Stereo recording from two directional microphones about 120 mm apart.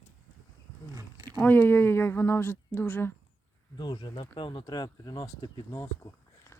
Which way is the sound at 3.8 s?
40° left (ahead or behind).